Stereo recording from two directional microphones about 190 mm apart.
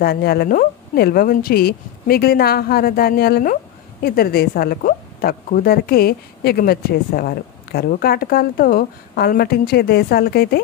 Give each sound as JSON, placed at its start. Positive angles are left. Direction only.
{"t": 0.0, "sound": "speech", "side_deg": 55}